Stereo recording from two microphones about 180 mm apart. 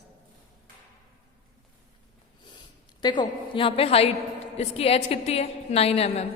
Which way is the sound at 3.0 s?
25° left (ahead or behind).